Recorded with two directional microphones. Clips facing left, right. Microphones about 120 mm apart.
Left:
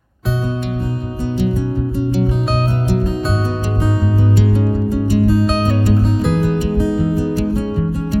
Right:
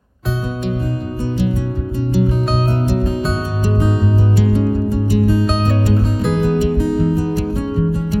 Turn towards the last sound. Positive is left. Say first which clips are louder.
# right 1 dB
turn(degrees=0)  # may be behind; listen again after turning